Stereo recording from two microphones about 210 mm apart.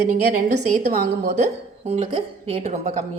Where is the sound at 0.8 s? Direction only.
50° right (ahead or behind).